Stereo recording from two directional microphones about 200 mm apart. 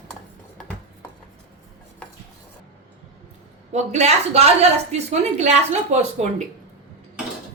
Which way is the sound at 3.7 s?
35° right (ahead or behind).